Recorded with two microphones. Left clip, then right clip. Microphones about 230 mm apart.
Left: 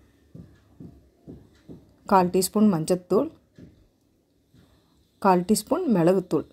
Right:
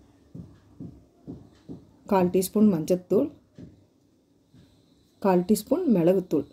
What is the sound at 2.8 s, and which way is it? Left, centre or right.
Speech, left.